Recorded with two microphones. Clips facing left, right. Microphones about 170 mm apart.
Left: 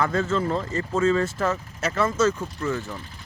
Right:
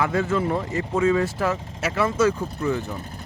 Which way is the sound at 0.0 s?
10° right (ahead or behind).